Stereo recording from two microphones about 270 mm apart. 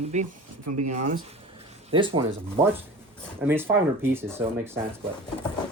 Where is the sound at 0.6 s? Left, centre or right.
Right.